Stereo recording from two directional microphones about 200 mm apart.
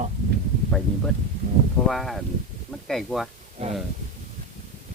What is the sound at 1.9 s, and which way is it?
Speech, centre (ahead or behind).